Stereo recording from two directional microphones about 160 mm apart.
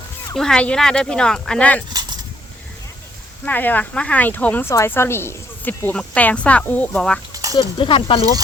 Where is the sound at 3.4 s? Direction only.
10° left (ahead or behind).